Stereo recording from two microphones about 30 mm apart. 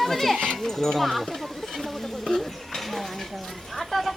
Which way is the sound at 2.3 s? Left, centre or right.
Centre.